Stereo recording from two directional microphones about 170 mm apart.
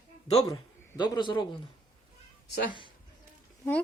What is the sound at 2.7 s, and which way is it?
Speech, 30° left (ahead or behind).